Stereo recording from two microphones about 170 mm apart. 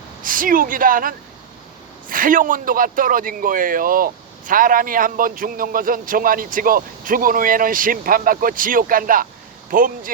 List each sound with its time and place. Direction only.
0.2 s a man's voice: 55° right (ahead or behind)